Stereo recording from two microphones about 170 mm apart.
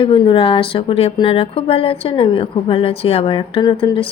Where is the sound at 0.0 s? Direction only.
30° left (ahead or behind).